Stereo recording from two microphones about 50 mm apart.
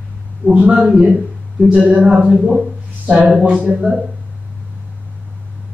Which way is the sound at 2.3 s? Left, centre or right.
Centre.